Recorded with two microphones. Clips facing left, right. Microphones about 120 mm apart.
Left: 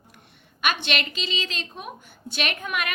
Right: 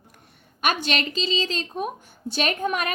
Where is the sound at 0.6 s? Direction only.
40° right (ahead or behind).